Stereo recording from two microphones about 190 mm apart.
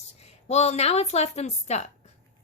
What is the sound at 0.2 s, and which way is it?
A woman's voice, 35° left (ahead or behind).